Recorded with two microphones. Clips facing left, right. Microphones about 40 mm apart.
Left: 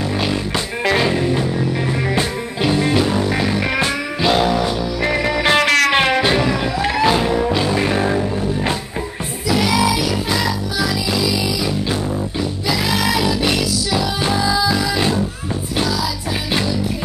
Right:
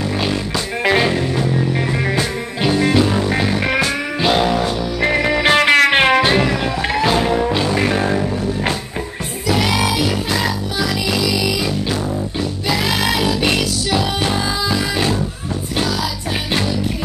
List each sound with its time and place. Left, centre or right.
0.9 s music: centre
2.7 s music: centre
9.5 s music: right
12.6 s music: right
14.3 s music: right